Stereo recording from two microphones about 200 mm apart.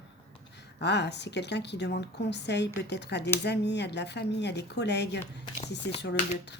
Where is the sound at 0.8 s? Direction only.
60° left (ahead or behind).